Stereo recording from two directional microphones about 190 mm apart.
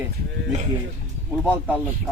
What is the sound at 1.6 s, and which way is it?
Speech, 5° left (ahead or behind).